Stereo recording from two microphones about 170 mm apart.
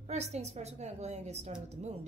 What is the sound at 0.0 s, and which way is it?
A woman's voice, 40° right (ahead or behind).